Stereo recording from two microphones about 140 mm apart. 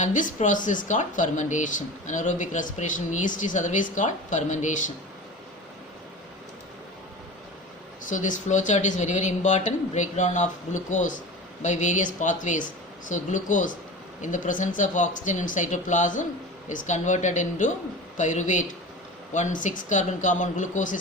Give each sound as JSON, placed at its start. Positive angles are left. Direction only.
{"t": 0.0, "sound": "speech", "side_deg": 65}
{"t": 8.0, "sound": "speech", "side_deg": 65}